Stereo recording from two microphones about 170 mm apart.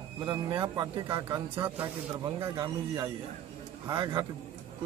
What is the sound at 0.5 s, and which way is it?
Speech, 25° right (ahead or behind).